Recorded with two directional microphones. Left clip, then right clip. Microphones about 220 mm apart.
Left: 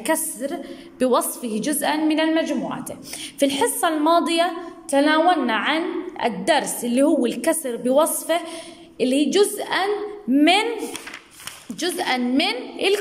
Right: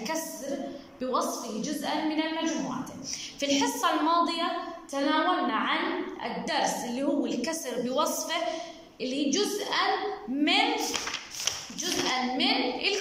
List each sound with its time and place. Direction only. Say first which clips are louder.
0.9 s a woman's voice: left 9 dB; 45° left (ahead or behind)
11.8 s a woman's voice: left 6 dB; 45° left (ahead or behind)